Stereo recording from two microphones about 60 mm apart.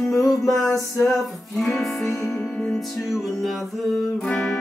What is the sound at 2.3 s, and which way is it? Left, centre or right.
Music, centre.